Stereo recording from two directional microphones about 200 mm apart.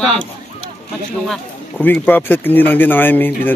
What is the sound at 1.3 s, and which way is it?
Speech, 10° left (ahead or behind).